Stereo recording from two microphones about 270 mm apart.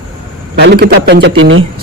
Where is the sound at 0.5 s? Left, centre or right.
Right.